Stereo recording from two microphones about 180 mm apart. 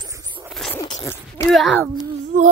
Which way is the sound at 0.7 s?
20° left (ahead or behind).